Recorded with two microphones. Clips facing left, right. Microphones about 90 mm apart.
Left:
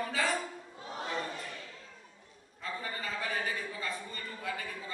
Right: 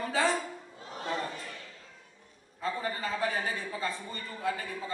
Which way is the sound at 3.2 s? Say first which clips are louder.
Right 2 dB; 35° right (ahead or behind).